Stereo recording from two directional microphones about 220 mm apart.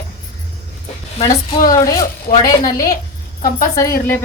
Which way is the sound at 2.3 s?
30° left (ahead or behind).